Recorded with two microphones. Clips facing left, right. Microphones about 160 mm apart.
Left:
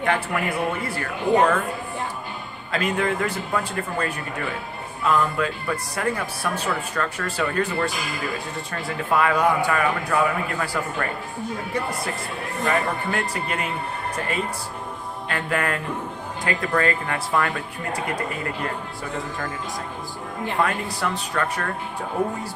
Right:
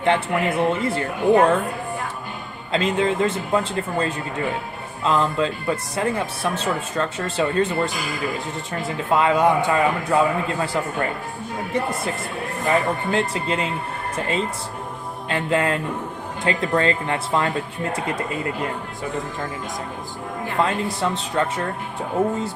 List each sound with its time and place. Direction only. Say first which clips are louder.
0.0 s speech: right 4 dB; 25° right (ahead or behind)
2.7 s speech: right 3 dB; 25° right (ahead or behind)
9.0 s speech: right 2 dB; 25° right (ahead or behind)
12.6 s speech: right 3 dB; 25° right (ahead or behind)
15.3 s speech: right 4 dB; 25° right (ahead or behind)
20.6 s speech: right 3 dB; 25° right (ahead or behind)